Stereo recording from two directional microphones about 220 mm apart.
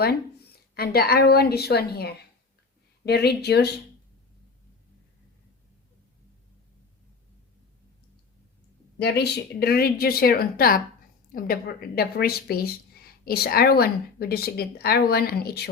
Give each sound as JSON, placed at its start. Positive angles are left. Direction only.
{"t": 0.0, "sound": "a woman's voice", "side_deg": 45}
{"t": 9.0, "sound": "a woman's voice", "side_deg": 50}